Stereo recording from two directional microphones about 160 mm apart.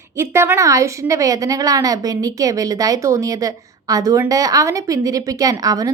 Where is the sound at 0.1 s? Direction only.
15° right (ahead or behind).